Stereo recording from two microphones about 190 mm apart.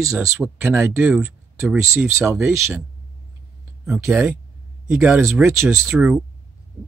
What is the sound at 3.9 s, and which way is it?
Speech, centre (ahead or behind).